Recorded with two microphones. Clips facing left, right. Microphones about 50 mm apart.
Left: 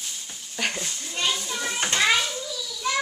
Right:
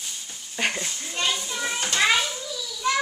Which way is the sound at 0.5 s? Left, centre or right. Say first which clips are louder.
Right 2 dB; centre.